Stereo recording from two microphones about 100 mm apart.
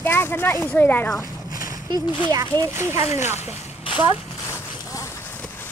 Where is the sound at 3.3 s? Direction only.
90° left.